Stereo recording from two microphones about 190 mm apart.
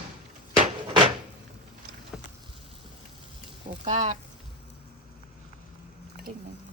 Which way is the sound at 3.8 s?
40° right (ahead or behind).